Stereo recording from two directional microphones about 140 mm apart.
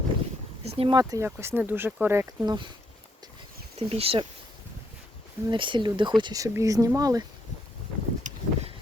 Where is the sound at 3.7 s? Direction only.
45° right (ahead or behind).